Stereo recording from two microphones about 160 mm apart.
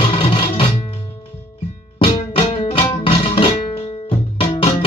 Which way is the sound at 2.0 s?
35° left (ahead or behind).